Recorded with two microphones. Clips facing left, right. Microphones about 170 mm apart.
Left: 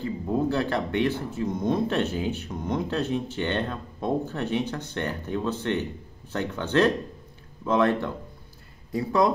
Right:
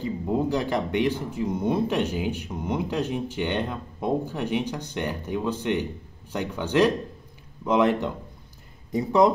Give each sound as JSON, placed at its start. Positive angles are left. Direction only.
{"t": 0.0, "sound": "speech", "side_deg": -15}